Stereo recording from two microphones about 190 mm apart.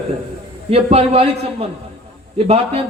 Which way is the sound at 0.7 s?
30° right (ahead or behind).